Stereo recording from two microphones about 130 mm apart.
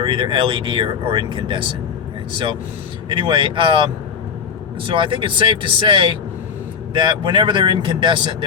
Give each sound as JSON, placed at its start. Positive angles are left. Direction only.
{"t": 0.0, "sound": "speech", "side_deg": -40}
{"t": 3.1, "sound": "speech", "side_deg": -40}